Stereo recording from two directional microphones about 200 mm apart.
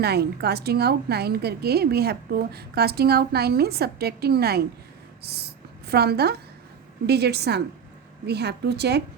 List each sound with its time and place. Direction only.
0.0 s a woman's voice: 55° right (ahead or behind)